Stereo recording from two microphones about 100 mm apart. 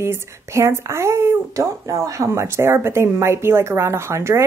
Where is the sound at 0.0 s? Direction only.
25° right (ahead or behind).